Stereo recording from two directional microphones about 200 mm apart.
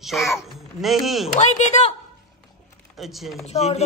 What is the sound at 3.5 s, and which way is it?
Speech, 30° left (ahead or behind).